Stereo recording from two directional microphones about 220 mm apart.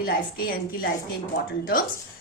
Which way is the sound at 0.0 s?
40° left (ahead or behind).